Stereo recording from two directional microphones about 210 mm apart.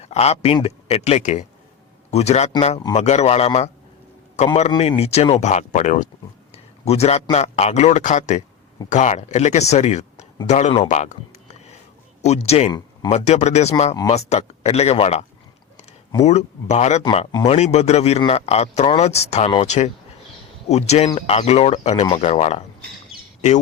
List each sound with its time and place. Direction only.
0.0 s speech: 30° left (ahead or behind)
16.2 s speech: 30° left (ahead or behind)